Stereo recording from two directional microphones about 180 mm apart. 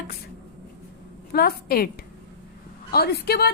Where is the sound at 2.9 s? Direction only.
60° left (ahead or behind).